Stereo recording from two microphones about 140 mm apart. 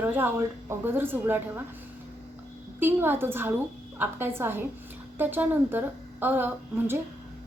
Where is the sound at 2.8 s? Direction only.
15° right (ahead or behind).